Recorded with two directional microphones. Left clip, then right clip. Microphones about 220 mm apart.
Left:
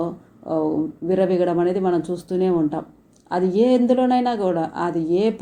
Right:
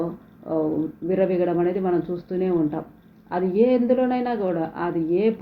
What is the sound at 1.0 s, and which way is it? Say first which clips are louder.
Speech: left 2 dB; 35° left (ahead or behind).